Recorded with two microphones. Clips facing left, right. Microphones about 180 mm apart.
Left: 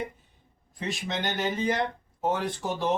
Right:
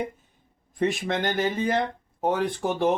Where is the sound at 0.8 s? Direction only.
55° right (ahead or behind).